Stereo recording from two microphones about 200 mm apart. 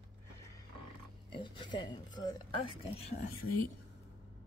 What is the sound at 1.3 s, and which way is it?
Speech, 25° left (ahead or behind).